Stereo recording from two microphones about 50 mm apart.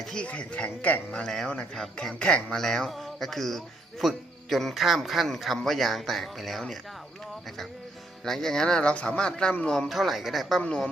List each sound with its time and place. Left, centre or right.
0.2 s a man's voice: left
1.1 s speech: centre
2.1 s a man's voice: centre
8.2 s speech: centre
9.9 s speech: centre